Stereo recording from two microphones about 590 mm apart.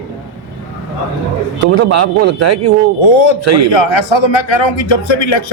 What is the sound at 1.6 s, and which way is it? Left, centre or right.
Speech, right.